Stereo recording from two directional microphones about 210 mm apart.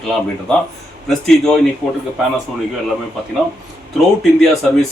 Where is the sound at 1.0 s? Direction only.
Centre (ahead or behind).